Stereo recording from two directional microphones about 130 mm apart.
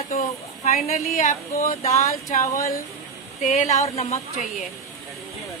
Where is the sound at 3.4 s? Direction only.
60° left (ahead or behind).